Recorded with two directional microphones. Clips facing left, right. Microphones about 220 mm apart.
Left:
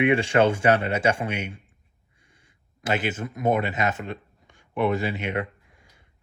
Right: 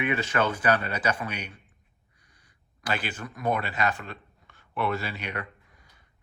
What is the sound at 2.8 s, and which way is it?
Speech, 20° left (ahead or behind).